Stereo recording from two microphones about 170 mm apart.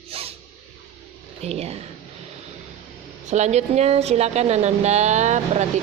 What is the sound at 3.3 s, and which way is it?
Speech, 45° right (ahead or behind).